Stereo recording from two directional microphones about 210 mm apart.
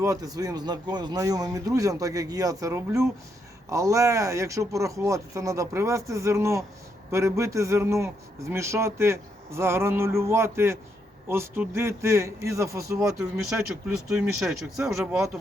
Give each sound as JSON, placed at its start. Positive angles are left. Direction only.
{"t": 0.0, "sound": "a man's voice", "side_deg": -15}
{"t": 13.5, "sound": "speech", "side_deg": 0}